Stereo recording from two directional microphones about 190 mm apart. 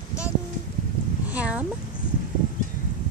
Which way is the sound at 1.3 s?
5° right (ahead or behind).